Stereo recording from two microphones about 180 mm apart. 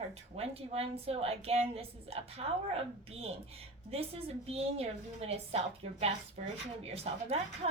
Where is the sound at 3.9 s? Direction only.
35° right (ahead or behind).